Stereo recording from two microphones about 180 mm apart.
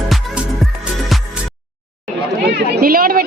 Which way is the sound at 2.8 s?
50° right (ahead or behind).